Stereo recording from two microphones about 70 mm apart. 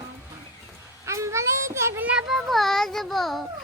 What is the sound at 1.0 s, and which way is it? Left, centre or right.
Child singing, right.